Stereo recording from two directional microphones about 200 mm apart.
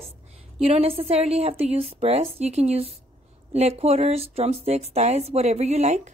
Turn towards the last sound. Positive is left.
turn(degrees=-35)  # may be behind; listen again after turning